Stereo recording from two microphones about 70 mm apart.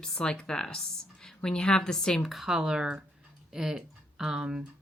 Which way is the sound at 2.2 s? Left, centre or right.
Centre.